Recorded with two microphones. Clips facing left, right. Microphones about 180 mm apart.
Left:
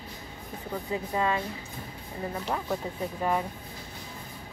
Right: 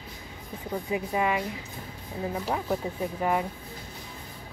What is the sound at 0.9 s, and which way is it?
Speech, 15° right (ahead or behind).